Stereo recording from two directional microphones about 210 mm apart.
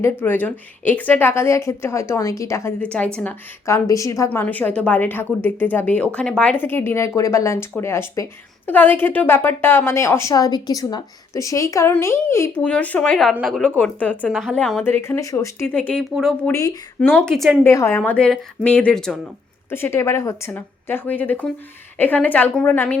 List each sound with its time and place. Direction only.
0.0 s a woman's voice: 10° left (ahead or behind)
16.5 s a woman's voice: 15° left (ahead or behind)
17.0 s speech: 5° left (ahead or behind)
17.7 s a woman's voice: 15° left (ahead or behind)